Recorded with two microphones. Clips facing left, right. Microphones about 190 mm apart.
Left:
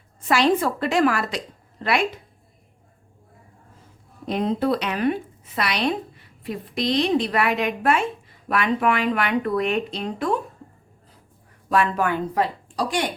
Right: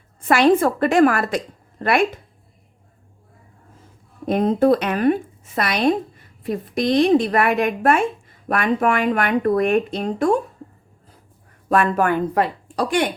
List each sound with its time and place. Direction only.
0.2 s a woman's voice: 55° right (ahead or behind)
4.3 s a woman's voice: 50° right (ahead or behind)
11.7 s a woman's voice: 50° right (ahead or behind)